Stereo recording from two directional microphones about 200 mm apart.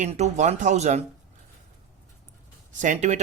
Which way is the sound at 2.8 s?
35° right (ahead or behind).